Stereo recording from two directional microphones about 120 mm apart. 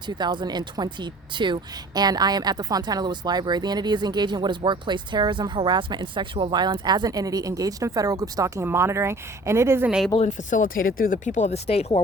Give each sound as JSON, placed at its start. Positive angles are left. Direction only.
{"t": 0.1, "sound": "speech", "side_deg": -35}
{"t": 10.2, "sound": "speech", "side_deg": 90}
{"t": 11.3, "sound": "speech", "side_deg": 80}